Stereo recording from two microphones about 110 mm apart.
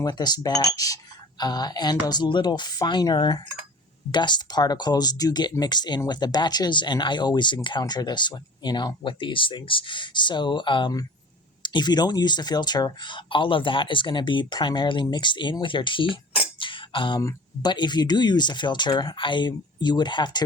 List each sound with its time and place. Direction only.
0.0 s speech: 40° left (ahead or behind)
16.6 s a sound: 50° left (ahead or behind)
17.2 s speech: 35° left (ahead or behind)